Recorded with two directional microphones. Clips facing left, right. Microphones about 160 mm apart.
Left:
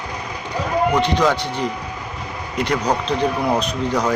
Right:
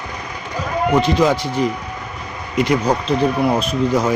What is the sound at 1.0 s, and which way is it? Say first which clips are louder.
Speech: right 2 dB; 10° right (ahead or behind).